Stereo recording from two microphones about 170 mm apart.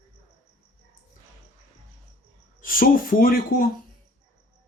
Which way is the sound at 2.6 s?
55° left (ahead or behind).